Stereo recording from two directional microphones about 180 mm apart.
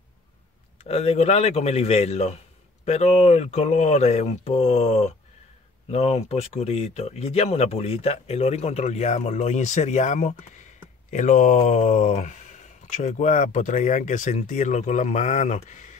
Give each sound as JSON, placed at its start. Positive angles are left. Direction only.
{"t": 0.8, "sound": "speech", "side_deg": 35}